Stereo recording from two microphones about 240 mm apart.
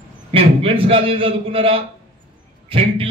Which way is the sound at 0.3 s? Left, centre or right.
Right.